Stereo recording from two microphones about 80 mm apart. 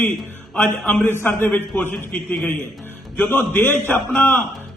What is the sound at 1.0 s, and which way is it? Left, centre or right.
Speech, left.